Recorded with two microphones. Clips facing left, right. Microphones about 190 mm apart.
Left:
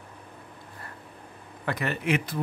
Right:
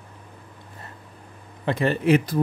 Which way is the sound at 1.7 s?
30° right (ahead or behind).